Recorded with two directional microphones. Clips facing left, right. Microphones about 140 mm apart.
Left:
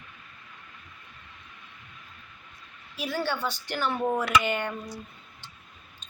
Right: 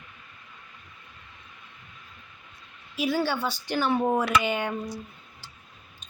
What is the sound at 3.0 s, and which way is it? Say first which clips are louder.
Speech: right 4 dB; 5° right (ahead or behind).